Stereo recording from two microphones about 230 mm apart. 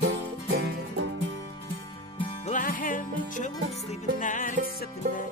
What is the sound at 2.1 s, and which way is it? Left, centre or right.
Music, left.